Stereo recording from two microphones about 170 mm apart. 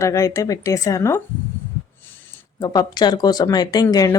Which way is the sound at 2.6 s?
25° left (ahead or behind).